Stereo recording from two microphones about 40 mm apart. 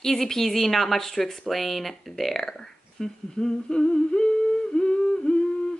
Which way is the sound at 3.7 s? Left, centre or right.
Left.